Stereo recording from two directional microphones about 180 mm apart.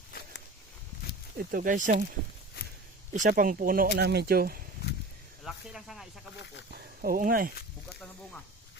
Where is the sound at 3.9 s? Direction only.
65° right (ahead or behind).